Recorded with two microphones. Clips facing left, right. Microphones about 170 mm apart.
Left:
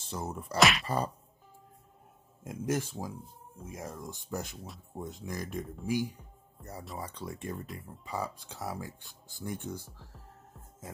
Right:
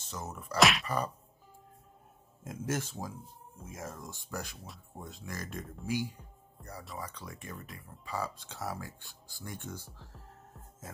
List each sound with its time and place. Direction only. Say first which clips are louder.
0.0 s speech: left 4 dB; 30° left (ahead or behind)
0.6 s a sound: even; centre (ahead or behind)
0.8 s speech: left 2 dB; 30° left (ahead or behind)
2.4 s speech: left 3 dB; 15° left (ahead or behind)
7.0 s speech: left 4 dB; 30° left (ahead or behind)
8.0 s speech: even; 20° left (ahead or behind)